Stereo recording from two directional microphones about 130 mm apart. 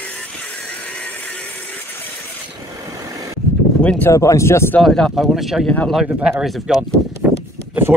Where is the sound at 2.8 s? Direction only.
25° right (ahead or behind).